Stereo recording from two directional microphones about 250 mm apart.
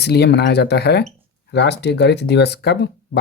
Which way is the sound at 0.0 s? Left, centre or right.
Left.